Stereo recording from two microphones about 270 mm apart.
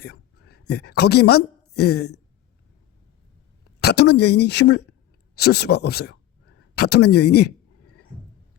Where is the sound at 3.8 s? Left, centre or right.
Left.